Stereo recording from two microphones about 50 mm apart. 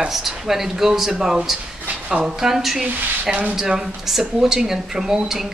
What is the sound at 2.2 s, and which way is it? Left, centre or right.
Speech, centre.